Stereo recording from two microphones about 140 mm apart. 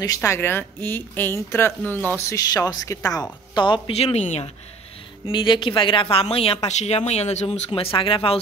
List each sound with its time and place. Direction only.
0.0 s speech: 25° left (ahead or behind); by 4.5 s 50° left (ahead or behind)
5.2 s a woman's voice: 35° left (ahead or behind)